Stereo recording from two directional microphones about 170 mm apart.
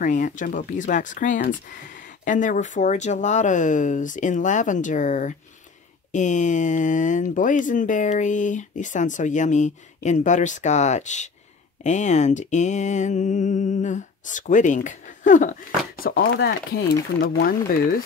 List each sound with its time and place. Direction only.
0.0 s speech: 50° left (ahead or behind)
16.0 s speech: 75° left (ahead or behind)